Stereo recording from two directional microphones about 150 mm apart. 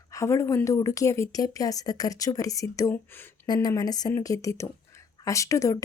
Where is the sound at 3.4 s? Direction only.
25° left (ahead or behind).